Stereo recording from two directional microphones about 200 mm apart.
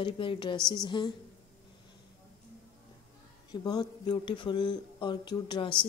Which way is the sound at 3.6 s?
20° left (ahead or behind).